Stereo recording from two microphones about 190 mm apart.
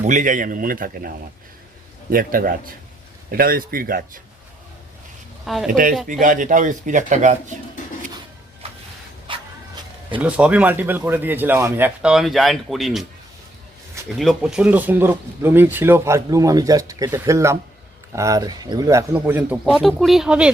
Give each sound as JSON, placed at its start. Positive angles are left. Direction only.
{"t": 0.0, "sound": "speech", "side_deg": -40}
{"t": 5.6, "sound": "speech", "side_deg": -45}
{"t": 9.3, "sound": "a sound", "side_deg": -25}
{"t": 10.2, "sound": "speech", "side_deg": -5}
{"t": 14.1, "sound": "speech", "side_deg": 0}